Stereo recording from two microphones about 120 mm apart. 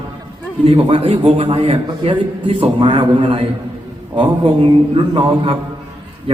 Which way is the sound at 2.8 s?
40° right (ahead or behind).